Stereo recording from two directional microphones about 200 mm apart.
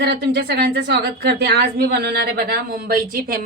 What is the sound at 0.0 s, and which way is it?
A woman's voice, 55° right (ahead or behind).